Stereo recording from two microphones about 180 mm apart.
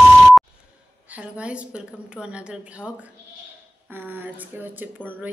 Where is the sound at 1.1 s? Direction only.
5° right (ahead or behind).